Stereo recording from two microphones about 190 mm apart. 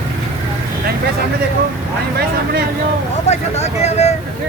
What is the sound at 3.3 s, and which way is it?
Vehicle, 35° left (ahead or behind).